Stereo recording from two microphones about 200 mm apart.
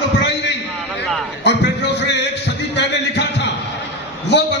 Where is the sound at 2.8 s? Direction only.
60° left (ahead or behind).